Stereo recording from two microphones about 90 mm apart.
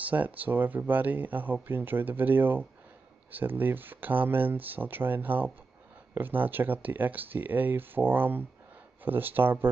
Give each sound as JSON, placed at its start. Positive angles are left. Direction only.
{"t": 0.0, "sound": "speech", "side_deg": -15}